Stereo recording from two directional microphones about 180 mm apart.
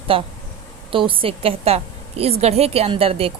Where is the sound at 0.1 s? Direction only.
30° right (ahead or behind).